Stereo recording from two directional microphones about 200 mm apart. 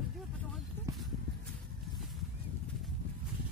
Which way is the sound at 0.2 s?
Centre (ahead or behind).